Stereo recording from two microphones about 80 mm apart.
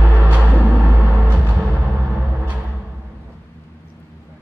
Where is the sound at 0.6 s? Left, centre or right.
Centre.